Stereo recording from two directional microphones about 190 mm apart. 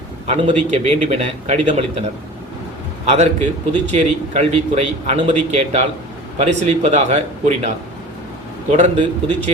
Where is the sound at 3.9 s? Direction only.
35° right (ahead or behind).